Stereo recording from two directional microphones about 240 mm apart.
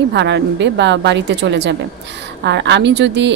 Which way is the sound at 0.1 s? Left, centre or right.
Right.